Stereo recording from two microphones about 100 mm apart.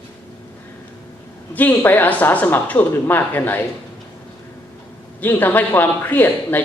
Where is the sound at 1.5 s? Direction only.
20° left (ahead or behind).